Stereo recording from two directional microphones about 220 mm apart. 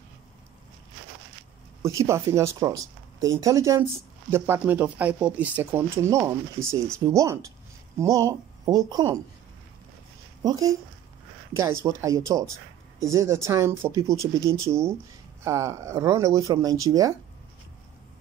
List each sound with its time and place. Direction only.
1.8 s speech: 15° right (ahead or behind)
10.4 s speech: 15° right (ahead or behind)